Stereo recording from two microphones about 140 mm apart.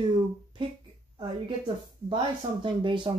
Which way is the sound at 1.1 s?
35° right (ahead or behind).